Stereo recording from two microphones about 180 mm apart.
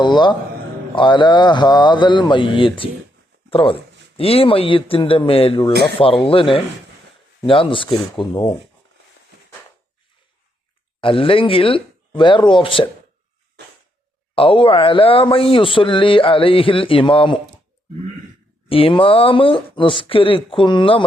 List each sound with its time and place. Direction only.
0.0 s a man's voice: 25° left (ahead or behind)
11.0 s a man's voice: 30° left (ahead or behind)
14.3 s a man's voice: 30° left (ahead or behind)
18.7 s a man's voice: 30° left (ahead or behind)